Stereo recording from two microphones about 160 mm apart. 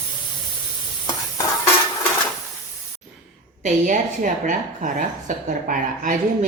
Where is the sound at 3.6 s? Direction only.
50° right (ahead or behind).